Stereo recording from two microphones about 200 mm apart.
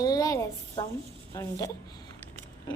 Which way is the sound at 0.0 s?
20° left (ahead or behind).